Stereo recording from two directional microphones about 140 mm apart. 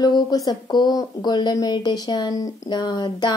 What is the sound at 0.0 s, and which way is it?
Speech, 30° left (ahead or behind).